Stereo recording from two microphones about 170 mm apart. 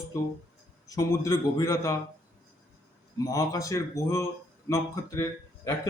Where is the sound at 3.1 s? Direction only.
20° left (ahead or behind).